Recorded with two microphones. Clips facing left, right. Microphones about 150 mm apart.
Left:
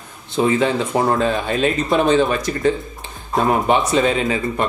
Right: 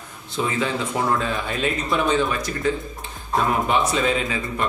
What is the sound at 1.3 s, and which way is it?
Speech, 25° left (ahead or behind).